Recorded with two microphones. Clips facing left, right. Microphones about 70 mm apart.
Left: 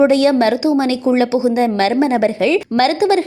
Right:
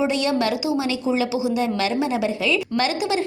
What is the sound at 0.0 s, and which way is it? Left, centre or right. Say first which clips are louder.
A woman's voice: left 9 dB; left.